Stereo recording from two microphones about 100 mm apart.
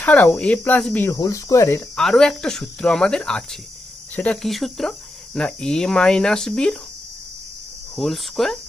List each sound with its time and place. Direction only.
0.0 s speech: 15° left (ahead or behind)
1.1 s speech: 35° left (ahead or behind)
2.0 s speech: 5° left (ahead or behind)
4.4 s speech: centre (ahead or behind)
7.9 s speech: centre (ahead or behind)